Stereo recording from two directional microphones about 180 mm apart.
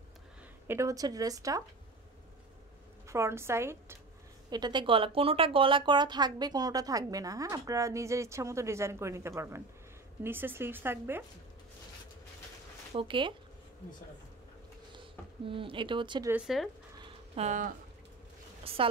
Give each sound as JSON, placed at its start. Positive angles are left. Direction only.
{"t": 0.7, "sound": "speech", "side_deg": -15}
{"t": 3.1, "sound": "a woman's voice", "side_deg": -15}
{"t": 12.9, "sound": "speech", "side_deg": -30}
{"t": 15.0, "sound": "speech", "side_deg": -30}
{"t": 16.3, "sound": "speech", "side_deg": -5}
{"t": 17.4, "sound": "speech", "side_deg": -45}
{"t": 18.6, "sound": "speech", "side_deg": -30}